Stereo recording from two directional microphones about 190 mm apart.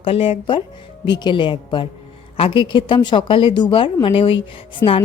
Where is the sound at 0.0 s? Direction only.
30° left (ahead or behind).